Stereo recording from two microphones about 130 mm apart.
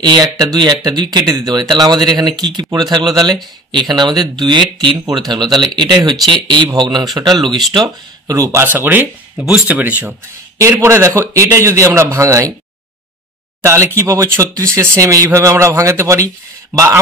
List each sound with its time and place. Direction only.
0.0 s speech: 30° right (ahead or behind)
7.3 s speech: centre (ahead or behind)
7.8 s speech: 25° right (ahead or behind)
13.6 s speech: 20° right (ahead or behind)